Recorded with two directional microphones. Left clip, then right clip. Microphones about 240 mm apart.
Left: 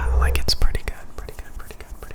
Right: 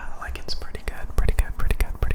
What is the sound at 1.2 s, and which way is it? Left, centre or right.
Whispering, right.